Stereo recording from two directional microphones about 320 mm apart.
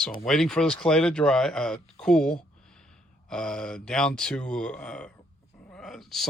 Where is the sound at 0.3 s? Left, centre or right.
Centre.